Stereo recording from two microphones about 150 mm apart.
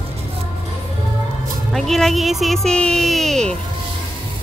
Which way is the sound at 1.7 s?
Centre (ahead or behind).